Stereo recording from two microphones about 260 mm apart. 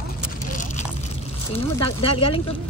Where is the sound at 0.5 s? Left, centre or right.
Left.